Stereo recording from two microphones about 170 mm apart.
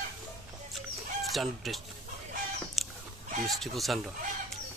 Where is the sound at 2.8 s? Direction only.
Centre (ahead or behind).